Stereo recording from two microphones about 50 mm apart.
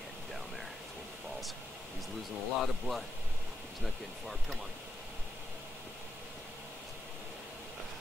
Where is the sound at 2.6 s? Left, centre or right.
Centre.